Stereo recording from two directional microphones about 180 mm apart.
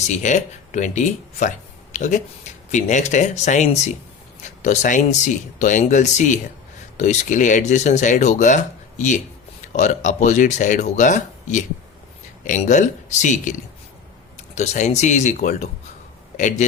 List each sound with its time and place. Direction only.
0.0 s speech: 40° left (ahead or behind)